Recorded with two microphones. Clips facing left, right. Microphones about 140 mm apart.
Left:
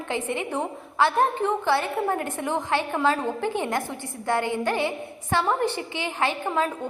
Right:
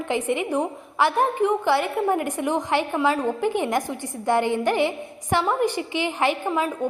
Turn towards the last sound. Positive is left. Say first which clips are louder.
# right 2 dB
turn(degrees=-15)  # may be behind; listen again after turning